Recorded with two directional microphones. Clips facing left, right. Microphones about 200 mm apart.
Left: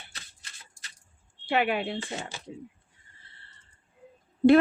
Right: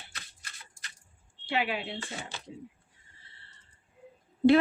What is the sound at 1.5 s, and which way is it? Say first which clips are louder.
Speech: left 5 dB; 55° left (ahead or behind).